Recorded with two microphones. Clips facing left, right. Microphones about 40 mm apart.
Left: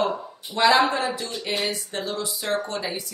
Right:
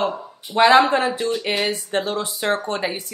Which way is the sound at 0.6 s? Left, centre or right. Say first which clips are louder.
Right 5 dB; right.